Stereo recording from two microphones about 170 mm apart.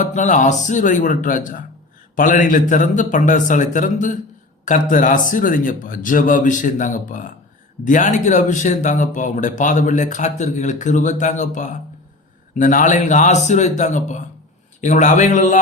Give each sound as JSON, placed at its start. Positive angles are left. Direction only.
{"t": 0.0, "sound": "speech", "side_deg": 45}